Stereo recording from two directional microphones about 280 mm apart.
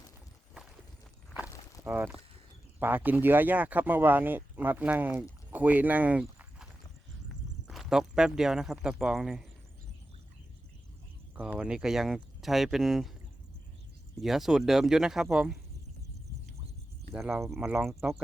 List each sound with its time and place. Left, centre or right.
1.8 s speech: centre
7.7 s speech: centre
11.3 s speech: centre
14.2 s speech: centre
17.2 s speech: centre